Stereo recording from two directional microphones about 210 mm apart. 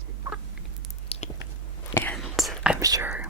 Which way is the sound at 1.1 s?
30° left (ahead or behind).